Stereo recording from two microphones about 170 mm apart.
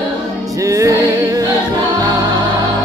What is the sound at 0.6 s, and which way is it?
Music, 20° right (ahead or behind).